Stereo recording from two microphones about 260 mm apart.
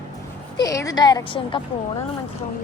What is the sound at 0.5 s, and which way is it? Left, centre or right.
A woman's voice, centre.